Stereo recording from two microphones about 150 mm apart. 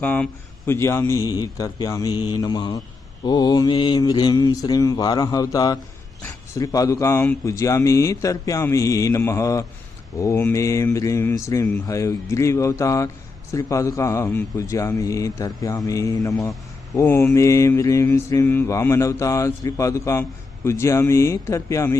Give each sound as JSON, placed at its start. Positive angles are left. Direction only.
{"t": 0.0, "sound": "speech", "side_deg": 10}